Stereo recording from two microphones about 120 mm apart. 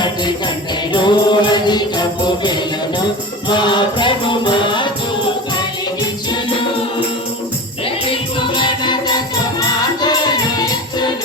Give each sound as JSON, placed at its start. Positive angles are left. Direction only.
{"t": 0.9, "sound": "music", "side_deg": 40}
{"t": 8.0, "sound": "music", "side_deg": 45}